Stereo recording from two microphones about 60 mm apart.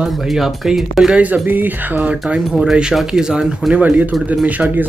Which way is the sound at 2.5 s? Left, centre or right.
Centre.